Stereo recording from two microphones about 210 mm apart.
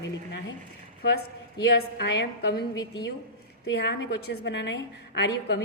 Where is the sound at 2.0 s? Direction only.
55° left (ahead or behind).